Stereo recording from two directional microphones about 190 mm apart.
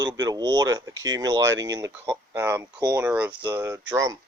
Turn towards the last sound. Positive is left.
turn(degrees=-15)  # may be behind; listen again after turning